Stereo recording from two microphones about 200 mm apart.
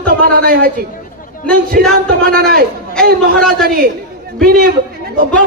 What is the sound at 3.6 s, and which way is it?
Speech, 45° right (ahead or behind).